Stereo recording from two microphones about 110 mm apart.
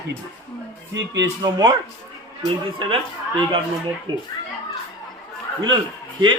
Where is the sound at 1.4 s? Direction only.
40° right (ahead or behind).